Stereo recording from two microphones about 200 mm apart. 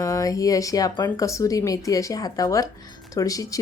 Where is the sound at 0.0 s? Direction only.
15° left (ahead or behind).